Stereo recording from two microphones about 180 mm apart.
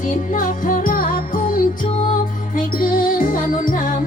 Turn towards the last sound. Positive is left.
turn(degrees=45)  # may be behind; listen again after turning